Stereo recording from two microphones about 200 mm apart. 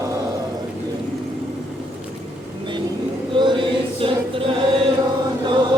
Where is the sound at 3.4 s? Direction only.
25° right (ahead or behind).